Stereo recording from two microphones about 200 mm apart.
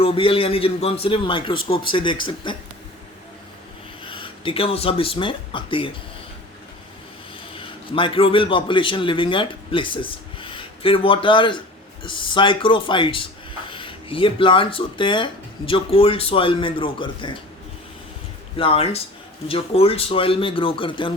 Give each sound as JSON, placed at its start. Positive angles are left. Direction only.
{"t": 0.0, "sound": "speech", "side_deg": 25}
{"t": 4.0, "sound": "speech", "side_deg": 25}
{"t": 7.5, "sound": "a man's voice", "side_deg": 25}
{"t": 18.5, "sound": "speech", "side_deg": 25}